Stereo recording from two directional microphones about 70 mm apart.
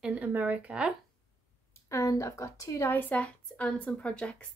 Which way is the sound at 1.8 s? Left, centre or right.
Left.